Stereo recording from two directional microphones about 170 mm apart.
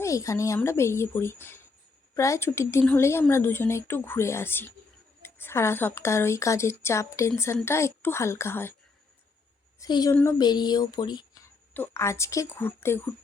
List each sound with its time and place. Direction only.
0.0 s speech: 20° left (ahead or behind)
9.8 s a woman's voice: 20° left (ahead or behind)
11.7 s speech: 15° left (ahead or behind)